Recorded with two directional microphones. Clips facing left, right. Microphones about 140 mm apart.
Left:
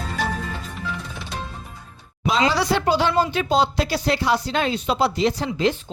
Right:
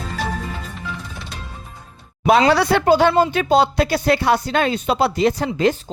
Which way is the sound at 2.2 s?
65° right (ahead or behind).